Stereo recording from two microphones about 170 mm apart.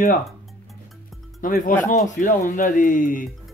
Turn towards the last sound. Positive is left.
turn(degrees=50)  # may be behind; listen again after turning